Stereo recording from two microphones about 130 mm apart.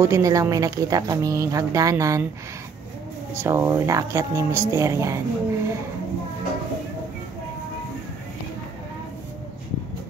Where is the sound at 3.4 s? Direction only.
20° right (ahead or behind).